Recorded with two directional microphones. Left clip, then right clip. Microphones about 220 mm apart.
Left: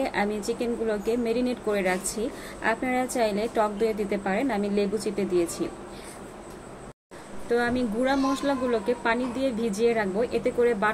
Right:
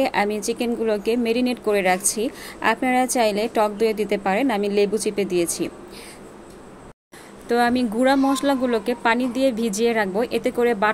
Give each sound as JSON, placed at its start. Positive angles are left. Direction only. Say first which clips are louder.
{"t": 0.0, "sound": "speech", "louder": "right 6 dB", "side_deg": -45}
{"t": 7.4, "sound": "speech", "louder": "right 5 dB", "side_deg": -50}